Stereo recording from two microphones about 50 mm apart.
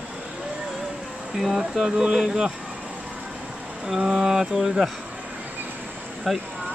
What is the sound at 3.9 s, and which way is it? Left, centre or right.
Speech, centre.